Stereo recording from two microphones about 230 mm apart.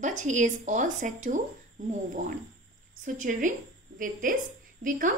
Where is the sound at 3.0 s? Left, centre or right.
Right.